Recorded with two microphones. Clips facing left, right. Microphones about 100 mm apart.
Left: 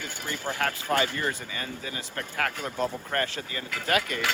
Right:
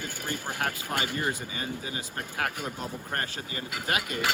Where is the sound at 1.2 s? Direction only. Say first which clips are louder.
Even; 15° right (ahead or behind).